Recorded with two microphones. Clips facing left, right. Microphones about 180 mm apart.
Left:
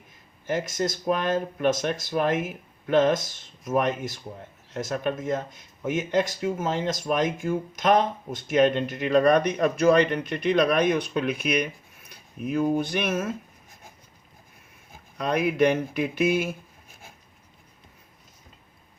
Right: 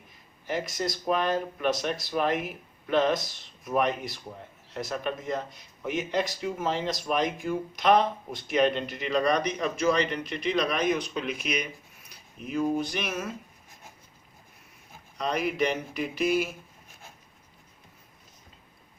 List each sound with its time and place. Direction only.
0.4 s speech: 45° left (ahead or behind)
15.2 s speech: 55° left (ahead or behind)